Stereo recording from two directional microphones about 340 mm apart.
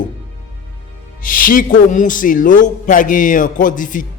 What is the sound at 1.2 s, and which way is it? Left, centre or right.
A man's voice, left.